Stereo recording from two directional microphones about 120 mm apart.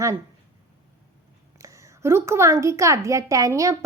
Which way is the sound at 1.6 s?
25° right (ahead or behind).